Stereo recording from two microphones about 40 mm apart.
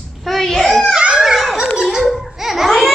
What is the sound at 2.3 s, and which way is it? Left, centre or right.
Babbling, centre.